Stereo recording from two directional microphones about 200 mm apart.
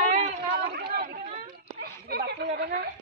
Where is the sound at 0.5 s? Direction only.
50° right (ahead or behind).